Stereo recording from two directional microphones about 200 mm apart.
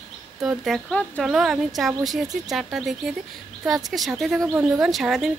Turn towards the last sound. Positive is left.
turn(degrees=0)  # may be behind; listen again after turning